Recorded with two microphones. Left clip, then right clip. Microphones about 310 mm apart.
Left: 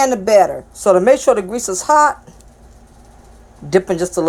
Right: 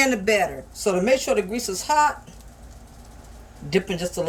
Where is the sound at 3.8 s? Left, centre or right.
Left.